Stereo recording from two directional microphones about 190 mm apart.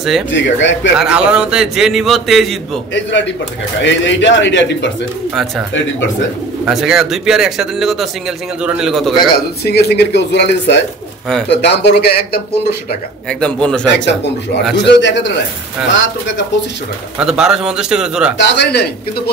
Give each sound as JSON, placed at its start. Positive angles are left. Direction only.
{"t": 0.3, "sound": "a man's voice", "side_deg": 70}
{"t": 0.9, "sound": "a man's voice", "side_deg": -5}
{"t": 2.9, "sound": "a man's voice", "side_deg": 75}
{"t": 6.6, "sound": "a man's voice", "side_deg": -5}
{"t": 9.3, "sound": "speech", "side_deg": 60}
{"t": 13.3, "sound": "a man's voice", "side_deg": 5}
{"t": 13.8, "sound": "a man's voice", "side_deg": 65}
{"t": 17.2, "sound": "a man's voice", "side_deg": -5}
{"t": 18.4, "sound": "speech", "side_deg": 65}